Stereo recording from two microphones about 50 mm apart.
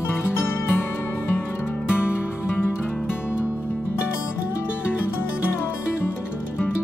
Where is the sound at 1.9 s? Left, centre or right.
Left.